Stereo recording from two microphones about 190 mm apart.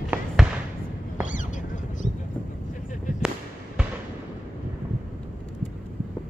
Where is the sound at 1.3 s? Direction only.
40° left (ahead or behind).